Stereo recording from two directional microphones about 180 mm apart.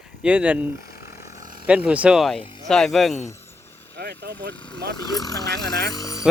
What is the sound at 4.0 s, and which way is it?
Speech, 65° right (ahead or behind).